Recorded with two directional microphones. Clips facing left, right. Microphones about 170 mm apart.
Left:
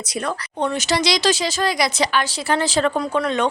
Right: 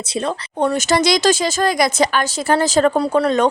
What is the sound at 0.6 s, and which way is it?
Speech, 45° right (ahead or behind).